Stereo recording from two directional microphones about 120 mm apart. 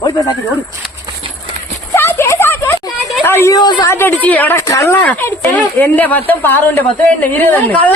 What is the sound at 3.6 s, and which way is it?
Speech, 40° left (ahead or behind).